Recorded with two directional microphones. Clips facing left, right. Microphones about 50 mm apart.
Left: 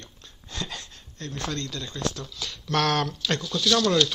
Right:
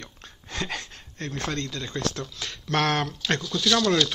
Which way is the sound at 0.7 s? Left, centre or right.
Right.